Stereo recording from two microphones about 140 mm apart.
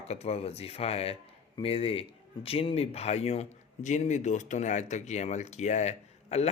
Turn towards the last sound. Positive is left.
turn(degrees=50)  # may be behind; listen again after turning